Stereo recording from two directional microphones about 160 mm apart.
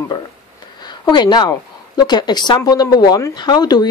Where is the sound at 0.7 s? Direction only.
25° left (ahead or behind).